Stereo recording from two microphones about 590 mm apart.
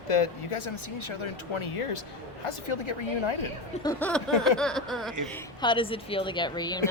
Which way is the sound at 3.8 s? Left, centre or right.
Centre.